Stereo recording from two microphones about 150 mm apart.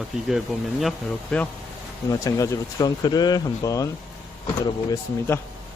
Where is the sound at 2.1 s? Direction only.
20° left (ahead or behind).